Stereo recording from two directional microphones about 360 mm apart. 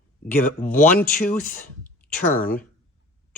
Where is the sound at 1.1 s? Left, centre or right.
Left.